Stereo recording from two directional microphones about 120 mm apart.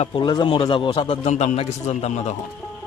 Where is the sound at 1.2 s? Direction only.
80° left.